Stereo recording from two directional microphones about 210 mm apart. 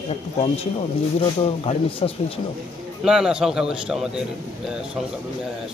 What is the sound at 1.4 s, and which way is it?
Speech, 25° left (ahead or behind).